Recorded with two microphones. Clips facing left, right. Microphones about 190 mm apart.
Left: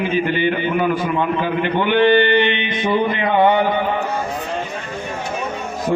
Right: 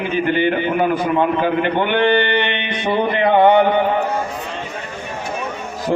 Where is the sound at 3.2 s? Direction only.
55° right (ahead or behind).